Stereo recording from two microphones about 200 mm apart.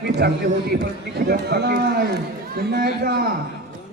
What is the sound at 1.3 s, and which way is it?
A man's voice, 55° right (ahead or behind).